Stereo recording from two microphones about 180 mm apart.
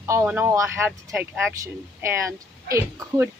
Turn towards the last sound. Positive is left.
turn(degrees=-15)  # may be behind; listen again after turning